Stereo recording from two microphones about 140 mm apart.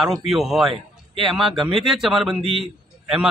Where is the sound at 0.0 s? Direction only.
Centre (ahead or behind).